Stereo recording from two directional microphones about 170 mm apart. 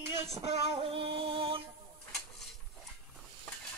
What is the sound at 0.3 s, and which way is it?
Female singing, 35° right (ahead or behind).